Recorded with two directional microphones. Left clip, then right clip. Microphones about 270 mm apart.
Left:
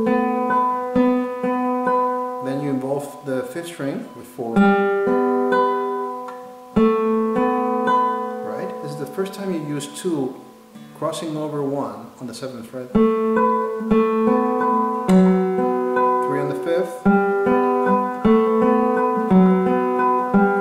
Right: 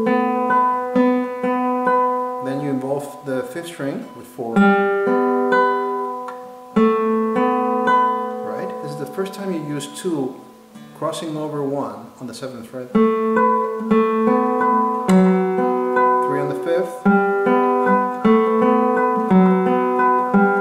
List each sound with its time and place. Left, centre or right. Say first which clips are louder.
0.1 s music: right 3 dB; centre
3.3 s speech: right 1 dB; centre
4.6 s music: right 1 dB; centre
8.1 s music: right 2 dB; right
9.2 s speech: even; centre
11.3 s speech: right 1 dB; right
13.0 s music: right 1 dB; centre
13.9 s guitar: right 1 dB; centre
14.7 s music: right 2 dB; centre
15.0 s music: right 1 dB; centre